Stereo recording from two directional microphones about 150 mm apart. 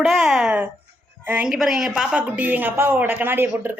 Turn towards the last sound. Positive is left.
turn(degrees=-15)  # may be behind; listen again after turning